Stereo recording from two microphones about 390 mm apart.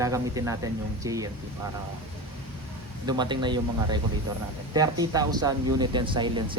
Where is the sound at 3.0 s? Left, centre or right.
Centre.